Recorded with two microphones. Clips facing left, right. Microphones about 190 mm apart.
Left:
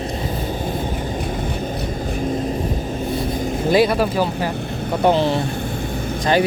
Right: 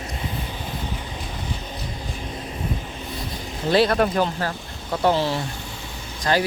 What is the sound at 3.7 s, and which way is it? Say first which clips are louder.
Speech: left 2 dB; 10° left (ahead or behind).